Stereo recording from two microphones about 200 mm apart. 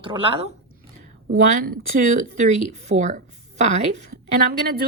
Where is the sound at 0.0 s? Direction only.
25° right (ahead or behind).